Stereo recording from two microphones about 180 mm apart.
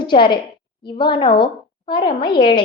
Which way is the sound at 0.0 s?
25° left (ahead or behind).